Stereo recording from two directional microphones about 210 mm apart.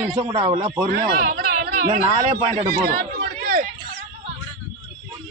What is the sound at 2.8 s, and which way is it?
Chatter, 45° right (ahead or behind).